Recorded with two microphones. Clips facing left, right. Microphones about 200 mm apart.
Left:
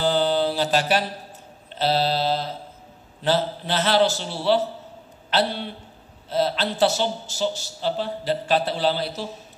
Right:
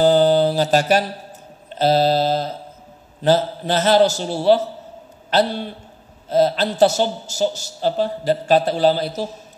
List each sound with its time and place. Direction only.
0.0 s mantra: 45° right (ahead or behind)
1.8 s a man's voice: 45° right (ahead or behind)